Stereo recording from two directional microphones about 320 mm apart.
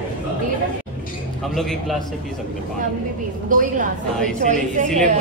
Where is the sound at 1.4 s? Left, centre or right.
Centre.